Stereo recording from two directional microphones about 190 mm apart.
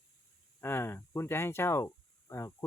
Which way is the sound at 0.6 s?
10° left (ahead or behind).